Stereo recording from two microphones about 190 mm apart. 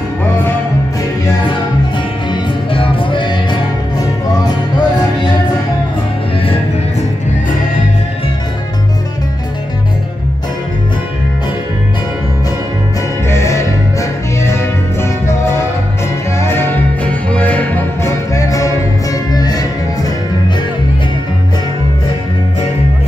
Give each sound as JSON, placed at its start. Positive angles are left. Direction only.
{"t": 2.3, "sound": "music", "side_deg": 25}
{"t": 13.3, "sound": "music", "side_deg": 15}